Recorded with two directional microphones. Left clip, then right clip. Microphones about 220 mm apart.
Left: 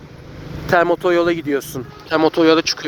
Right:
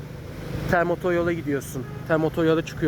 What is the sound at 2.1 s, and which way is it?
Speech, 20° left (ahead or behind).